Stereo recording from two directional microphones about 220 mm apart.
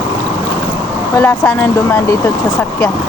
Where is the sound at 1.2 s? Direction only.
10° left (ahead or behind).